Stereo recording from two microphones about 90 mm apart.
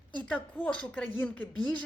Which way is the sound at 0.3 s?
15° left (ahead or behind).